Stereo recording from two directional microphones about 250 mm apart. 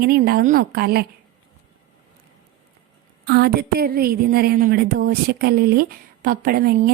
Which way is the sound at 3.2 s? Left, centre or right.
Right.